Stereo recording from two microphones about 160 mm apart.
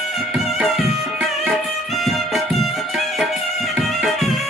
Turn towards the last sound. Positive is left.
turn(degrees=0)  # may be behind; listen again after turning